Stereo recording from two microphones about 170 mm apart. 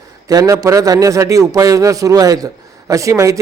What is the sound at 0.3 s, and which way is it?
A man's voice, 20° right (ahead or behind).